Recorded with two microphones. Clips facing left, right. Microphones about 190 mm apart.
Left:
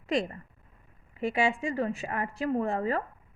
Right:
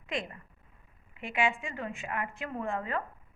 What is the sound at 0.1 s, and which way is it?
A woman's voice, 40° left (ahead or behind).